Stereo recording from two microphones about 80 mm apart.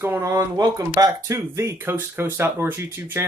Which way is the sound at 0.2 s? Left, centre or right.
Right.